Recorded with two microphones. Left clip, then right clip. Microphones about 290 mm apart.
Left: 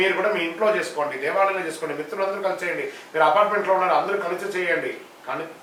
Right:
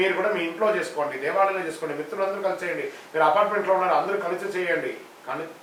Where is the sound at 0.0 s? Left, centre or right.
Centre.